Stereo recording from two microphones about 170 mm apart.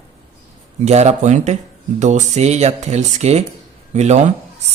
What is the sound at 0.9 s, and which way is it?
Speech, 40° right (ahead or behind).